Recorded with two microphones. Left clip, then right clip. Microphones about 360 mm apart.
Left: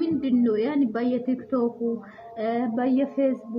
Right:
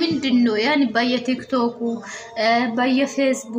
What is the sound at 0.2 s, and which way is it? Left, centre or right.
A woman's voice, left.